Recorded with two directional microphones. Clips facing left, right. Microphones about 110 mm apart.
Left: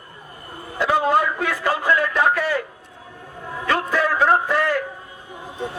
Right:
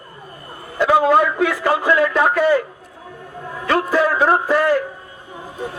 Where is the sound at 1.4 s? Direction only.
30° right (ahead or behind).